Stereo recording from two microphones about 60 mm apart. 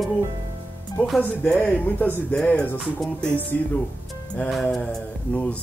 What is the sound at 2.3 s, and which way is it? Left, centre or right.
Speech, centre.